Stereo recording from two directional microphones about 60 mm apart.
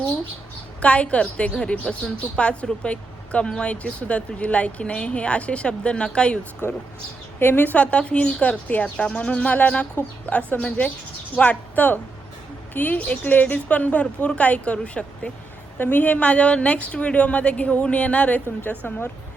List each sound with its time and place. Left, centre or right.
0.8 s a woman's voice: centre
6.6 s a woman's voice: left; by 15.3 s centre
15.8 s a woman's voice: left